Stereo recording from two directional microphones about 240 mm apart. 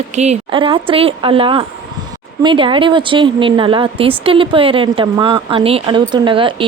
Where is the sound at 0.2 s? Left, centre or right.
Right.